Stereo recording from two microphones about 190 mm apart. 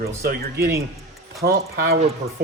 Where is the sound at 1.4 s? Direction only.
55° right (ahead or behind).